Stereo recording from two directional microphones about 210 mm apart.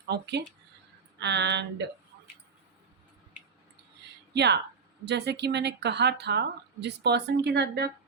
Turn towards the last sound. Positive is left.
turn(degrees=-50)  # may be behind; listen again after turning